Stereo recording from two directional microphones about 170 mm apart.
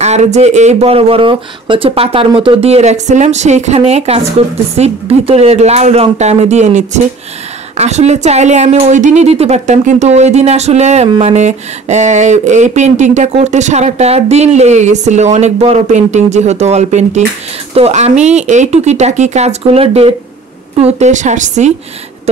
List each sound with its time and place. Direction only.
0.0 s a woman's voice: 40° right (ahead or behind)